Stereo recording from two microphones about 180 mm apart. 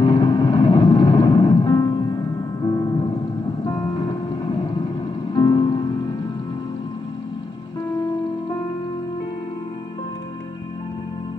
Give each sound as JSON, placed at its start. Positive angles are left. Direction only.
{"t": 0.0, "sound": "music", "side_deg": 25}
{"t": 5.3, "sound": "music", "side_deg": 25}